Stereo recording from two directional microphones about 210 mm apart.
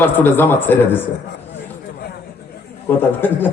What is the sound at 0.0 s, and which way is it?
A man's voice, 10° left (ahead or behind).